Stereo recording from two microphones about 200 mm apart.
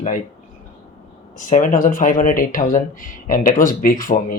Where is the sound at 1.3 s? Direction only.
40° left (ahead or behind).